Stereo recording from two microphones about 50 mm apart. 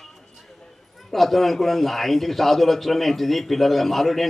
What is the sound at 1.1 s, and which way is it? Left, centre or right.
A man's voice, centre.